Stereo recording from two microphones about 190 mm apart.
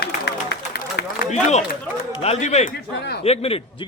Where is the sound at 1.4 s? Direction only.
40° left (ahead or behind).